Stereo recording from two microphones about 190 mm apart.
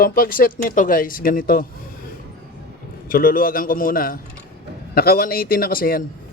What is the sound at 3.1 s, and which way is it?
A man's voice, 50° left (ahead or behind).